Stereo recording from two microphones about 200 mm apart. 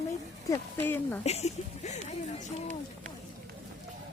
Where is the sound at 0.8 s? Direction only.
10° left (ahead or behind).